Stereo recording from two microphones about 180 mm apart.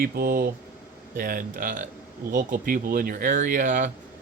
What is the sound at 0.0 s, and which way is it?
Speech, 55° right (ahead or behind).